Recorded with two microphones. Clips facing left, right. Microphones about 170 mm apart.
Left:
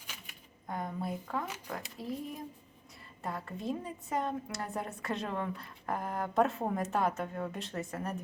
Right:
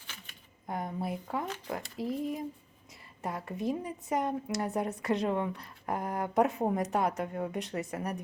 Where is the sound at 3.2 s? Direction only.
20° right (ahead or behind).